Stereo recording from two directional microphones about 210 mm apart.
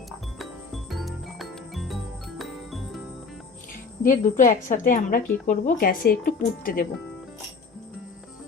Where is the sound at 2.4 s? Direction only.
Centre (ahead or behind).